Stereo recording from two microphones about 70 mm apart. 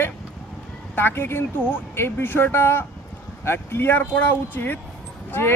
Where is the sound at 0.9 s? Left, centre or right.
Left.